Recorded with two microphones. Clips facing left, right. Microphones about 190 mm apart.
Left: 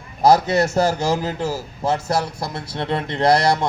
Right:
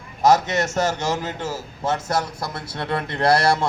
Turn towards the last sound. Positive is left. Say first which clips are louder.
# left 2 dB
turn(degrees=20)  # may be behind; listen again after turning